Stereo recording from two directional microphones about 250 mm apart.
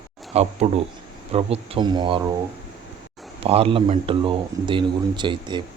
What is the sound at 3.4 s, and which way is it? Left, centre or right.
Speech, right.